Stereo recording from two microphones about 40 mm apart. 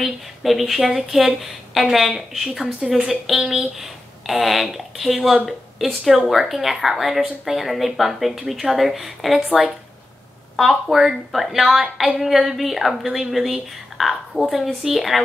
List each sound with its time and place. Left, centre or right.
0.0 s speech: centre
10.5 s speech: centre